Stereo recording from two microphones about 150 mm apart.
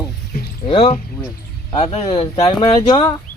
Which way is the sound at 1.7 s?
45° left (ahead or behind).